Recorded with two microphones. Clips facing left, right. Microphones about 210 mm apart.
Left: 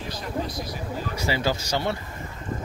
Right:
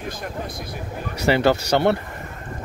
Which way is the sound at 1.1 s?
65° right (ahead or behind).